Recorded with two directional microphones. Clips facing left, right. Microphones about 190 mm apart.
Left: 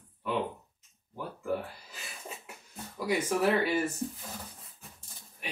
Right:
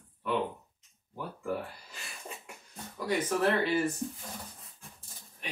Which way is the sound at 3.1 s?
10° left (ahead or behind).